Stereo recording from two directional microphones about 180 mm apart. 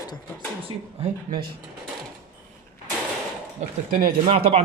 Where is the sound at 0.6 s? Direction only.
30° right (ahead or behind).